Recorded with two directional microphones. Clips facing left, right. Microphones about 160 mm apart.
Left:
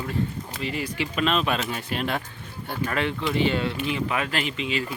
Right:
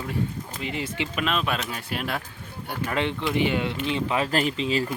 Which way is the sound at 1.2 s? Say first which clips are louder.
Left 3 dB; centre (ahead or behind).